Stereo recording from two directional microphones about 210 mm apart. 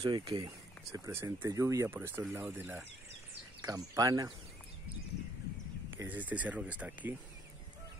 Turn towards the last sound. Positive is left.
turn(degrees=-5)  # may be behind; listen again after turning